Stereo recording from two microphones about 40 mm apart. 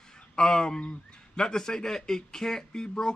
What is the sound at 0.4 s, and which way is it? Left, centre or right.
A man's voice, centre.